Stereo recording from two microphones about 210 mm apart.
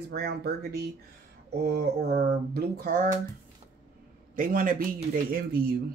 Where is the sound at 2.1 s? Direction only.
45° right (ahead or behind).